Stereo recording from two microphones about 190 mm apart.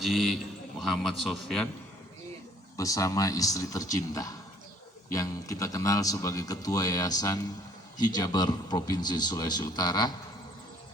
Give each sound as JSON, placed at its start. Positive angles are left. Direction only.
{"t": 0.0, "sound": "a man's voice", "side_deg": 0}
{"t": 2.7, "sound": "a man's voice", "side_deg": 15}